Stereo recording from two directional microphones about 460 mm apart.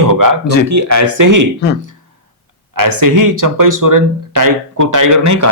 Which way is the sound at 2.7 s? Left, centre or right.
Right.